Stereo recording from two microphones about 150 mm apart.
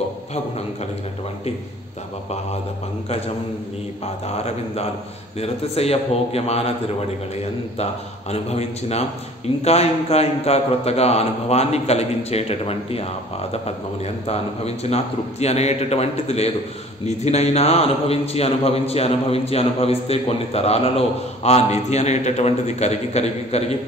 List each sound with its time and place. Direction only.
3.1 s a man's voice: 45° left (ahead or behind)